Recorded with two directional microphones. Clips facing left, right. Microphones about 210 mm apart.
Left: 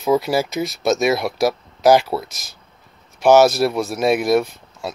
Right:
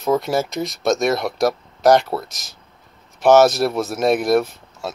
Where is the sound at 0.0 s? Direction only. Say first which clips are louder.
Left 1 dB; 5° left (ahead or behind).